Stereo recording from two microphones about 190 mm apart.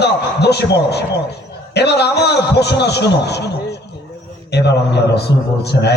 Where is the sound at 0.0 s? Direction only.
60° left (ahead or behind).